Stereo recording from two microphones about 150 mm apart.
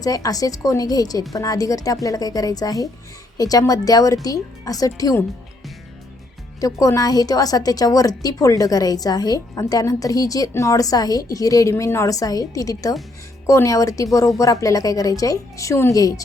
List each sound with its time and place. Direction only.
0.0 s a woman's voice: 25° left (ahead or behind)
6.6 s a woman's voice: 20° left (ahead or behind)